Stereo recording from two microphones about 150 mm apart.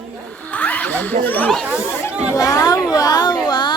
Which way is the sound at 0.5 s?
10° left (ahead or behind).